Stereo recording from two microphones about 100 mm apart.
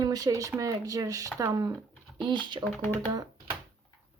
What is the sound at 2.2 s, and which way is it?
Speech, 50° right (ahead or behind).